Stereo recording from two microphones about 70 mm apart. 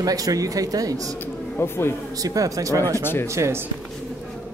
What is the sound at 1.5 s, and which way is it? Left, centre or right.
Speech, left.